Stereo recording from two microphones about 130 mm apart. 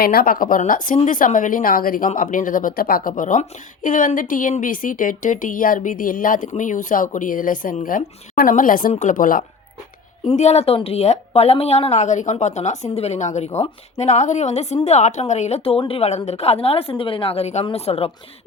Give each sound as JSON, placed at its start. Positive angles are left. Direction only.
{"t": 0.3, "sound": "speech", "side_deg": 90}
{"t": 8.9, "sound": "speech", "side_deg": 70}
{"t": 10.3, "sound": "a woman's voice", "side_deg": 55}